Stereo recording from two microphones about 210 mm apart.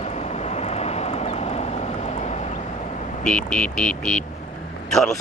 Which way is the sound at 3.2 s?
5° left (ahead or behind).